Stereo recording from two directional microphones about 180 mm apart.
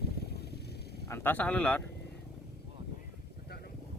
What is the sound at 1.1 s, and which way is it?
Speech, 10° left (ahead or behind).